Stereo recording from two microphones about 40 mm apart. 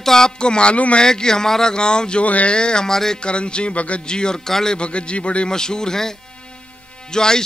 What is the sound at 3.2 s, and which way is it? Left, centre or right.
Speech, left.